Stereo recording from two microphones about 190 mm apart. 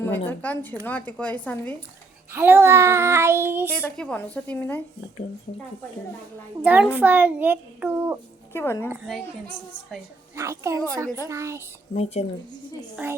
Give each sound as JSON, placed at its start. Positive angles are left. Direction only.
{"t": 0.3, "sound": "a woman's voice", "side_deg": 10}
{"t": 2.3, "sound": "child singing", "side_deg": -10}
{"t": 3.8, "sound": "a woman's voice", "side_deg": 5}
{"t": 6.6, "sound": "child singing", "side_deg": -10}
{"t": 8.5, "sound": "a woman's voice", "side_deg": 10}
{"t": 10.3, "sound": "child singing", "side_deg": -15}
{"t": 12.2, "sound": "a woman's voice", "side_deg": 35}